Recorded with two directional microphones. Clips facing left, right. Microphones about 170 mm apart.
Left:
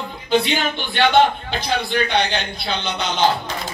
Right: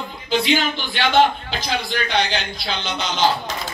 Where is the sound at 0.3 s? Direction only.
55° left (ahead or behind).